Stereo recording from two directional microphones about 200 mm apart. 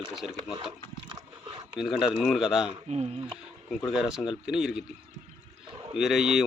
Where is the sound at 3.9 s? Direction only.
Centre (ahead or behind).